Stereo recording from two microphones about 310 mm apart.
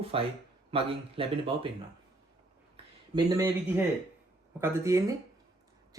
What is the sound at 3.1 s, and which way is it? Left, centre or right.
Speech, centre.